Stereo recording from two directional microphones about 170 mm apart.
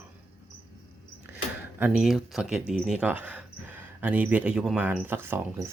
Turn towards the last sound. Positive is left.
turn(degrees=-15)  # may be behind; listen again after turning